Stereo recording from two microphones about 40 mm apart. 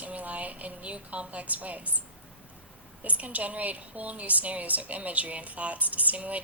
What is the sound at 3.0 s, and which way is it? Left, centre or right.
A woman's voice, right.